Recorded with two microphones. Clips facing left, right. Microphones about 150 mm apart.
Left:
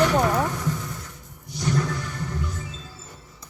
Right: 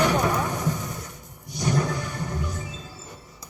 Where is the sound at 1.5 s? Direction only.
15° right (ahead or behind).